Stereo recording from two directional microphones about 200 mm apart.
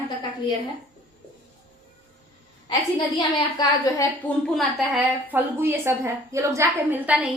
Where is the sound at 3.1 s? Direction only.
20° left (ahead or behind).